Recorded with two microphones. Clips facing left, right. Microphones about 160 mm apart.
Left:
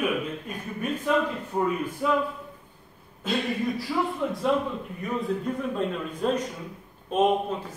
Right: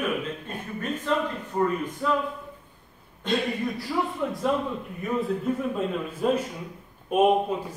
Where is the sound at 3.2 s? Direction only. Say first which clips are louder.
Even; centre (ahead or behind).